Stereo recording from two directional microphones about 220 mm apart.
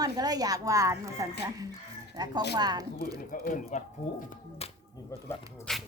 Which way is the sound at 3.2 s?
40° left (ahead or behind).